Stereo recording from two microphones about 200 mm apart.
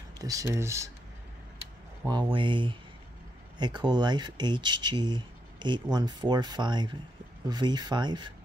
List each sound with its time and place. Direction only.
0.2 s speech: 15° right (ahead or behind)
2.0 s speech: 25° right (ahead or behind)